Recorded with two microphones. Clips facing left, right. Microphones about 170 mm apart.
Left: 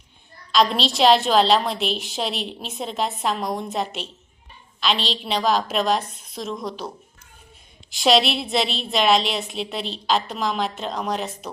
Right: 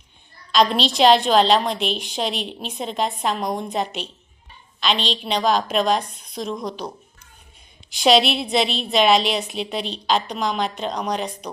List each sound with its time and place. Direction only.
0.5 s a woman's voice: centre (ahead or behind)